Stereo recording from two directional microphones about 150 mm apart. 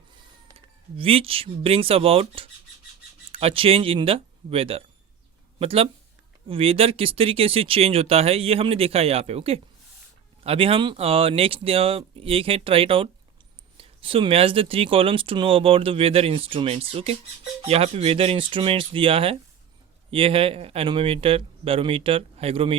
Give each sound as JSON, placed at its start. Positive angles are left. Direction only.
{"t": 0.5, "sound": "speech", "side_deg": -40}